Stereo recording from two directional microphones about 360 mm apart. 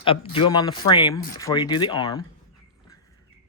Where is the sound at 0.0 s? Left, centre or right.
Centre.